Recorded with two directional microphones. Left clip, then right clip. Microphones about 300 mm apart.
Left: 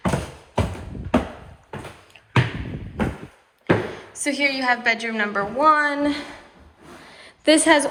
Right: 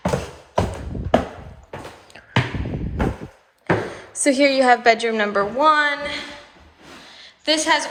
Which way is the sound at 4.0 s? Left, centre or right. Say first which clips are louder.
Right 5 dB; right.